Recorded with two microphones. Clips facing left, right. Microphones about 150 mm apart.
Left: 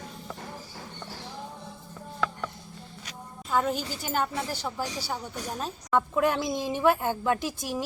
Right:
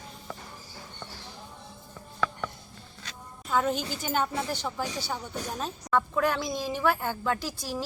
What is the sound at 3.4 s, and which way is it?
A woman's voice, 5° left (ahead or behind).